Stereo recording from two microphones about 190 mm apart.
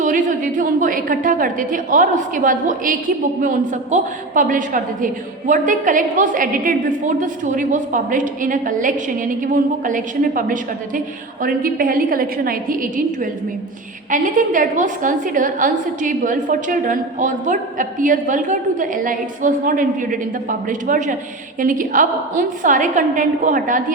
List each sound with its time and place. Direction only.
0.0 s a woman's voice: 45° right (ahead or behind)